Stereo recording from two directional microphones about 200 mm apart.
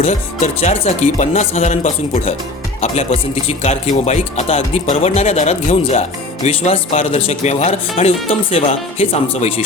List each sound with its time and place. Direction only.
0.0 s speech: 35° left (ahead or behind)